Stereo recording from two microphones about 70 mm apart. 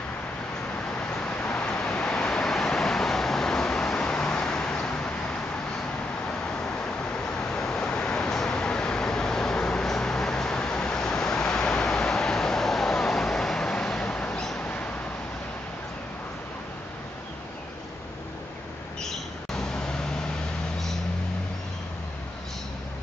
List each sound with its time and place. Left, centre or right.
1.2 s vehicle: centre
7.2 s vehicle: centre
14.6 s a sound: left
19.5 s vehicle: centre